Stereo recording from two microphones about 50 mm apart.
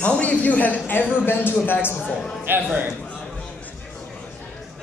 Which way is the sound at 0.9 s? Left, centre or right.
Left.